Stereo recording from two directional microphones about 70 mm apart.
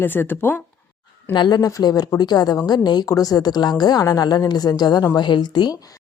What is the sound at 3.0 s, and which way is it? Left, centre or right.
A woman's voice, left.